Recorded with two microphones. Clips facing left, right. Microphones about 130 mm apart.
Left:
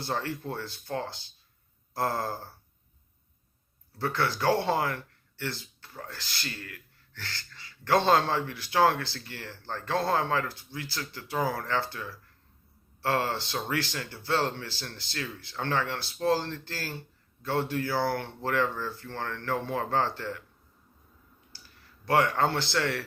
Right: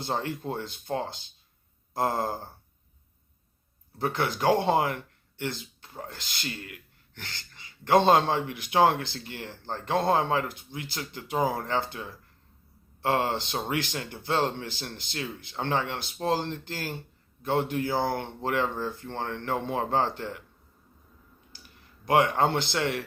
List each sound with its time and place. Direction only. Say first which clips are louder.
0.0 s speech: right 2 dB; 20° right (ahead or behind)
3.9 s speech: right 1 dB; 20° right (ahead or behind)
21.5 s speech: right 1 dB; 20° right (ahead or behind)